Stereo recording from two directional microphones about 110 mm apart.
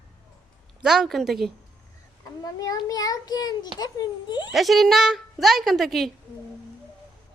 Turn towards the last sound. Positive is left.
turn(degrees=0)  # may be behind; listen again after turning